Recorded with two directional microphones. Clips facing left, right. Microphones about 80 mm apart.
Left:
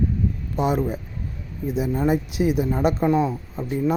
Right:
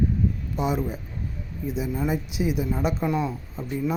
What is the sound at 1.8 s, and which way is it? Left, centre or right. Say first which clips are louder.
Speech: left 6 dB; left.